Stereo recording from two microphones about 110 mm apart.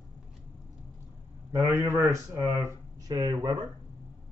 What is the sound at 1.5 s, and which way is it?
Speech, 30° right (ahead or behind).